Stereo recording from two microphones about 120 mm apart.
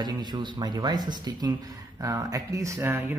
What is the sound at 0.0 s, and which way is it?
Speech, 40° right (ahead or behind).